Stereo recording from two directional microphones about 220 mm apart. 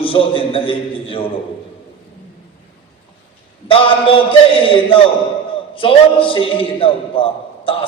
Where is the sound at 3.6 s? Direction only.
25° left (ahead or behind).